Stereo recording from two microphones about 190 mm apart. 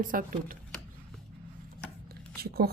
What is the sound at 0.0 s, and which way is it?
Speech, 45° right (ahead or behind).